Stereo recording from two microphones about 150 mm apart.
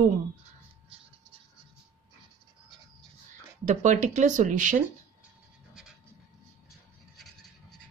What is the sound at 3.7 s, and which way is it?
Speech, 55° right (ahead or behind).